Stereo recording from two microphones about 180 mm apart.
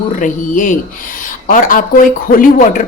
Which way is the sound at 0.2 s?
45° left (ahead or behind).